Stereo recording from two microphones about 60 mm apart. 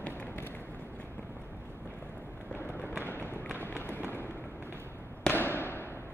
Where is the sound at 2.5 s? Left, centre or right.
Left.